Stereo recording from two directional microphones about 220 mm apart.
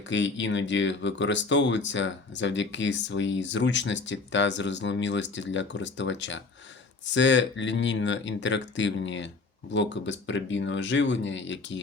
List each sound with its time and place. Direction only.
0.1 s speech: 55° left (ahead or behind)